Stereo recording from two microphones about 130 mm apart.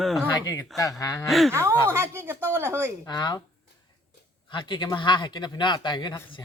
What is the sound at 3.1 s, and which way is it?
Speech, 35° left (ahead or behind).